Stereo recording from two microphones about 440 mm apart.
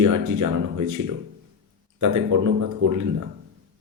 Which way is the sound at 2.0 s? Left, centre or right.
Right.